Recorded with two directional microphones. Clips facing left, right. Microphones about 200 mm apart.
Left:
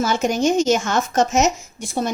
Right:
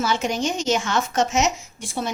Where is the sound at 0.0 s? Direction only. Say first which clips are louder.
Left 4 dB; 45° left (ahead or behind).